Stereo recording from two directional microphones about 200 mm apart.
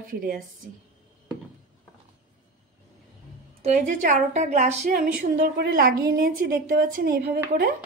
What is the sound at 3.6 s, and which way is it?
A woman's voice, 35° right (ahead or behind).